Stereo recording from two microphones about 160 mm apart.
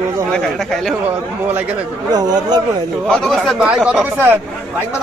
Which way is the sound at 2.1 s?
25° right (ahead or behind).